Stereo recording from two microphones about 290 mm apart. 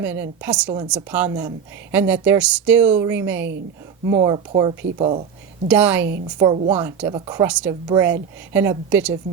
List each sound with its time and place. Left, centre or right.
0.0 s a woman's voice: centre
5.6 s a woman's voice: centre